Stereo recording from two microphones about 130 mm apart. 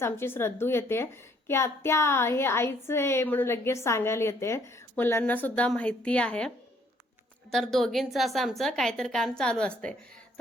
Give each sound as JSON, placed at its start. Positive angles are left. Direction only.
{"t": 0.0, "sound": "a woman's voice", "side_deg": 20}
{"t": 7.5, "sound": "a woman's voice", "side_deg": 0}